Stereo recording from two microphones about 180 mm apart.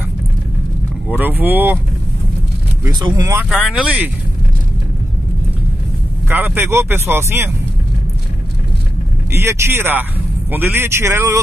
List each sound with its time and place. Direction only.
1.1 s speech: 10° right (ahead or behind)
2.9 s speech: 20° right (ahead or behind)
3.4 s speech: 5° right (ahead or behind)
6.2 s speech: 10° right (ahead or behind)
9.3 s speech: 15° right (ahead or behind)